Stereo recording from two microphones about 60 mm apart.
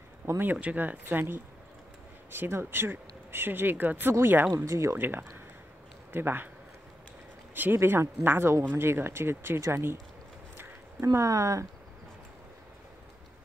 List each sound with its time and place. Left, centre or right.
0.4 s speech: right
4.9 s speech: right
7.5 s speech: right
11.1 s speech: right